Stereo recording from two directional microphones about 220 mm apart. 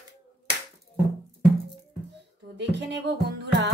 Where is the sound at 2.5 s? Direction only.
50° right (ahead or behind).